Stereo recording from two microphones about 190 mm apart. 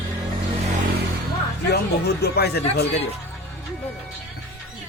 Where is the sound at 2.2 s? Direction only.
60° left (ahead or behind).